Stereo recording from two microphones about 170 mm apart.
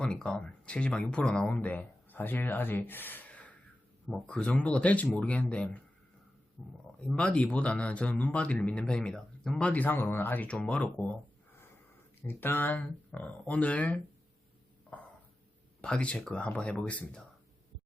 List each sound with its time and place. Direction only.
0.0 s speech: 5° left (ahead or behind)
12.2 s speech: 10° left (ahead or behind)
14.9 s a sound: 10° left (ahead or behind)
15.8 s speech: 5° left (ahead or behind)